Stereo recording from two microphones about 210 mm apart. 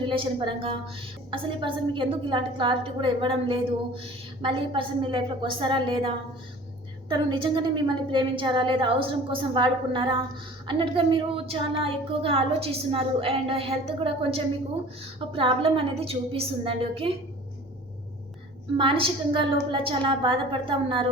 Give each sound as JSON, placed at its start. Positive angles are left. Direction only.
{"t": 0.0, "sound": "a woman's voice", "side_deg": -25}
{"t": 18.8, "sound": "a woman's voice", "side_deg": -25}